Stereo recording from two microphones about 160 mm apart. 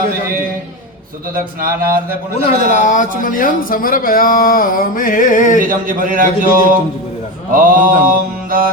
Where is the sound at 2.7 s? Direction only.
50° left (ahead or behind).